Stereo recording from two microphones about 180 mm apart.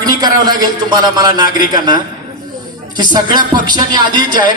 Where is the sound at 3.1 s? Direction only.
25° right (ahead or behind).